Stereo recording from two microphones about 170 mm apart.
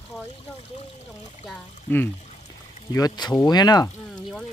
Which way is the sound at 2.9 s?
20° left (ahead or behind).